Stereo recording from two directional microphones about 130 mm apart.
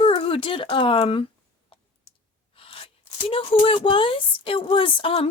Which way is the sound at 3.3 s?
45° left (ahead or behind).